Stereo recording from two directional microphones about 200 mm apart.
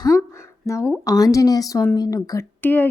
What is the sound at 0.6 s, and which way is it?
A woman's voice, 15° left (ahead or behind).